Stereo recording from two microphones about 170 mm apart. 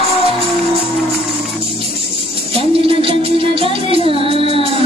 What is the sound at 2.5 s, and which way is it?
Music, 35° right (ahead or behind).